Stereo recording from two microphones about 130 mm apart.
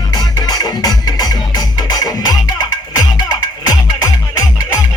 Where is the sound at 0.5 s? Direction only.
30° left (ahead or behind).